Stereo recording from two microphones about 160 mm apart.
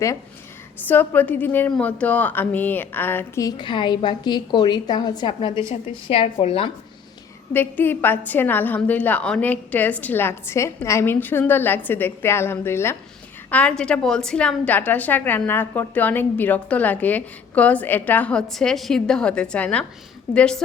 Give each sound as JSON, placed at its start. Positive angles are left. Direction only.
{"t": 0.9, "sound": "a woman's voice", "side_deg": 10}
{"t": 7.5, "sound": "a woman's voice", "side_deg": 10}